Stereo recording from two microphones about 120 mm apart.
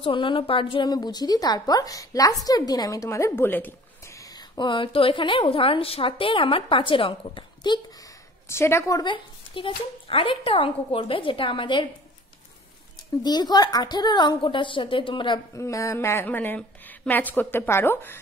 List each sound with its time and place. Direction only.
0.0 s a woman's voice: 45° left (ahead or behind)
8.5 s a woman's voice: 20° left (ahead or behind); by 11.9 s 45° left (ahead or behind)
13.2 s a woman's voice: 35° left (ahead or behind)
15.5 s a woman's voice: 25° left (ahead or behind)